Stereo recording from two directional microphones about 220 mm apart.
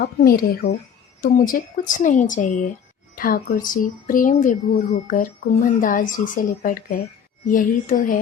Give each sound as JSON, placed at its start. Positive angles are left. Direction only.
{"t": 0.0, "sound": "speech", "side_deg": 45}